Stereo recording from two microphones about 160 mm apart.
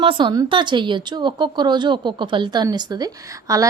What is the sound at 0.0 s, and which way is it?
Speech, 30° right (ahead or behind).